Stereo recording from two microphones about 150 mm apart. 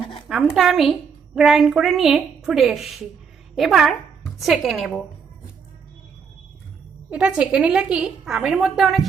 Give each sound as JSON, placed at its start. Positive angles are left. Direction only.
{"t": 0.0, "sound": "a sound", "side_deg": 35}
{"t": 0.3, "sound": "a woman's voice", "side_deg": 0}
{"t": 7.1, "sound": "a woman's voice", "side_deg": -10}